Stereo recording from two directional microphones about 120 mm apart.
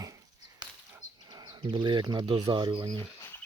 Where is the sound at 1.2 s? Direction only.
35° right (ahead or behind).